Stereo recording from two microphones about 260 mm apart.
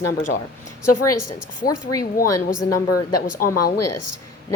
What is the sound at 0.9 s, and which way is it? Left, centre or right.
A woman's voice, left.